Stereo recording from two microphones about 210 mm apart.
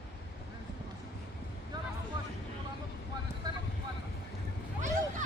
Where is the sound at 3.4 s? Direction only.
20° right (ahead or behind).